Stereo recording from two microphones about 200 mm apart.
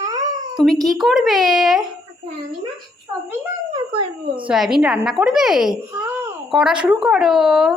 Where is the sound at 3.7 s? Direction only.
25° right (ahead or behind).